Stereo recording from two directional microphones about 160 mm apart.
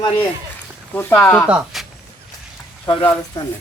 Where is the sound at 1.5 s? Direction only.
5° right (ahead or behind).